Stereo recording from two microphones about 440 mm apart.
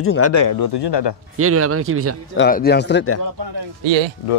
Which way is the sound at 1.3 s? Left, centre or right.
Right.